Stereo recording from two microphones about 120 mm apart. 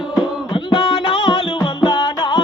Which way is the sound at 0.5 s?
50° left (ahead or behind).